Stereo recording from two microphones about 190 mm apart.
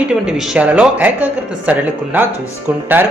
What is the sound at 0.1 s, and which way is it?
A man's voice, 5° right (ahead or behind).